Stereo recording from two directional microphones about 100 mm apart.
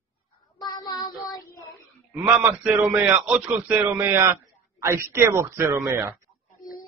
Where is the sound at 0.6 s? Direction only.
45° left (ahead or behind).